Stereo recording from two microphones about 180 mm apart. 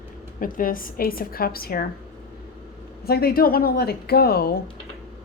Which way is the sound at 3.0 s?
60° left (ahead or behind).